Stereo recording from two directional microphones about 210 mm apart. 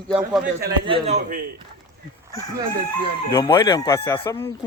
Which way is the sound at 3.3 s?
20° left (ahead or behind).